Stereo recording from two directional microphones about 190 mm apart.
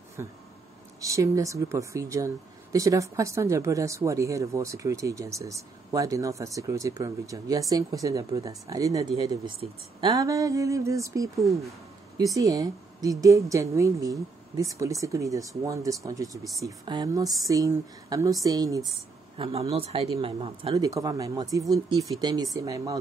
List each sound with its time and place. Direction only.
0.2 s speech: 15° right (ahead or behind)
12.4 s speech: 20° right (ahead or behind)
20.7 s speech: 20° right (ahead or behind)